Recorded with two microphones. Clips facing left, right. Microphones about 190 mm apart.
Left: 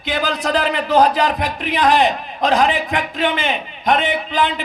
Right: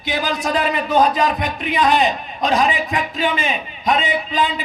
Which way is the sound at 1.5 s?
65° left (ahead or behind).